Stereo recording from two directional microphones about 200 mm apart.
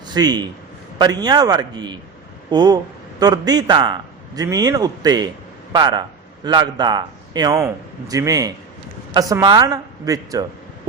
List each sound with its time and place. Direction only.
0.1 s a man's voice: 20° right (ahead or behind)